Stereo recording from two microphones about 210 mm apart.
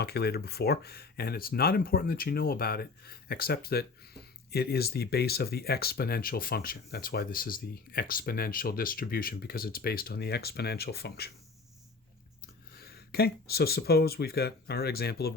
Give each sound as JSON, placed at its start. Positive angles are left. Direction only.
{"t": 0.0, "sound": "speech", "side_deg": 50}
{"t": 12.7, "sound": "speech", "side_deg": 45}